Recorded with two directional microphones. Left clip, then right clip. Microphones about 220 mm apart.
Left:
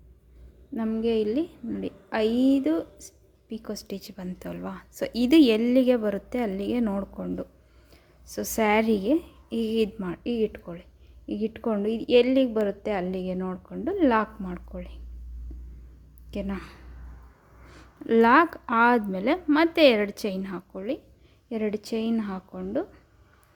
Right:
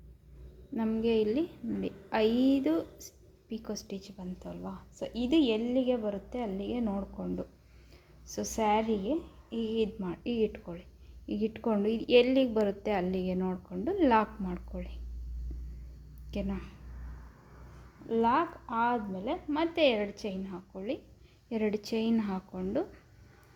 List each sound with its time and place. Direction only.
0.7 s a woman's voice: 15° left (ahead or behind)
16.3 s a woman's voice: 20° left (ahead or behind)
18.0 s a woman's voice: 35° left (ahead or behind)
21.5 s a woman's voice: 15° left (ahead or behind)